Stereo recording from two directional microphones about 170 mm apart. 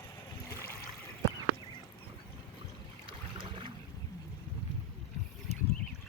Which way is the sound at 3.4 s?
30° right (ahead or behind).